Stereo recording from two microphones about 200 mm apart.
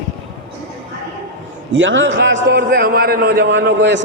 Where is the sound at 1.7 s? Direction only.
70° right (ahead or behind).